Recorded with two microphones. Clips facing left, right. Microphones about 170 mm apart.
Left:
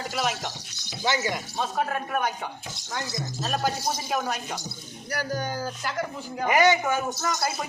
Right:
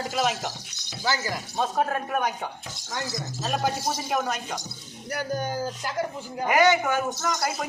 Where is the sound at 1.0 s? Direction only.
20° left (ahead or behind).